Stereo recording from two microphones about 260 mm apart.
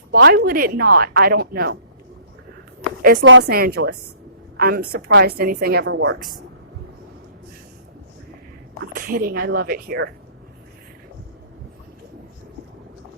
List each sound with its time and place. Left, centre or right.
0.1 s a woman's voice: right
3.0 s a woman's voice: right
9.0 s a woman's voice: right